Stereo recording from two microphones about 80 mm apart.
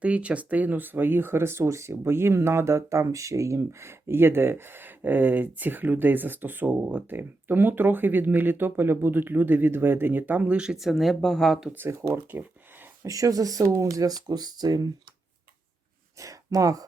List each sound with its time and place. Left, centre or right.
0.0 s speech: centre
10.8 s speech: centre
11.9 s speech: right
16.1 s speech: right